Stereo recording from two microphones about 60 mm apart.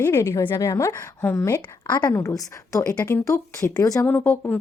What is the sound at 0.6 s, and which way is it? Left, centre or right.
Speech, left.